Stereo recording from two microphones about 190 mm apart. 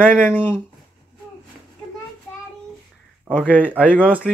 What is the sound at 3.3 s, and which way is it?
Speech, 10° right (ahead or behind).